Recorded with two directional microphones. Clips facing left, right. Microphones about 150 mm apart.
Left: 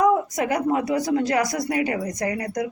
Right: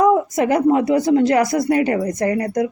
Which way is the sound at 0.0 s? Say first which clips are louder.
Right 5 dB; 25° right (ahead or behind).